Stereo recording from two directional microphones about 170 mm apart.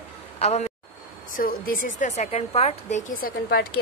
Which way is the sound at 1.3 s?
55° left (ahead or behind).